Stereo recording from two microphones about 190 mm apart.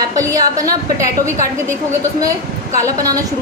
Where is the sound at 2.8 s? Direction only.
20° right (ahead or behind).